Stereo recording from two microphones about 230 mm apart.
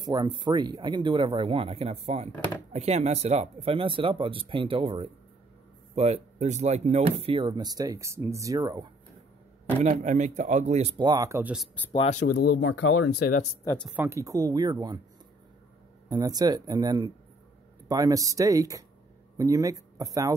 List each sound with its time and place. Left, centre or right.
0.0 s speech: centre
9.8 s speech: right; by 11.8 s centre
11.9 s speech: left
12.8 s speech: left
13.2 s speech: left
13.7 s speech: centre
13.9 s speech: centre
16.1 s speech: centre